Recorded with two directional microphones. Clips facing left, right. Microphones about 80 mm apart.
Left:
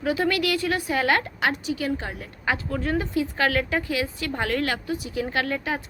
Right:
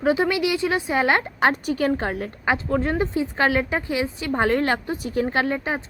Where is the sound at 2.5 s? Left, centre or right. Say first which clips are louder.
Right 3 dB; right.